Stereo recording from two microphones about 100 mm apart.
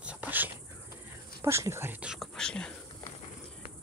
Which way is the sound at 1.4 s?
25° right (ahead or behind).